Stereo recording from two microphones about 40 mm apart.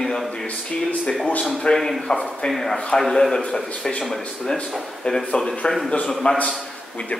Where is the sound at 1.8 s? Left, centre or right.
Centre.